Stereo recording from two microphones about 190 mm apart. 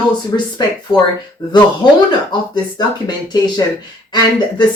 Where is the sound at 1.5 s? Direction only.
25° left (ahead or behind).